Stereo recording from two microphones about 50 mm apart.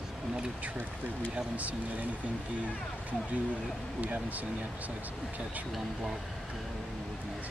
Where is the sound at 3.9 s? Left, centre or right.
Right.